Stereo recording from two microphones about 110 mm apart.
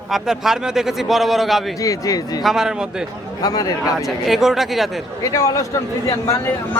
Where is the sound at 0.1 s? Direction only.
5° right (ahead or behind).